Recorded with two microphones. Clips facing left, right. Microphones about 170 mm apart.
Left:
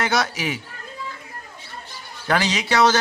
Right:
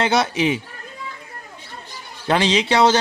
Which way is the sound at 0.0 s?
30° right (ahead or behind).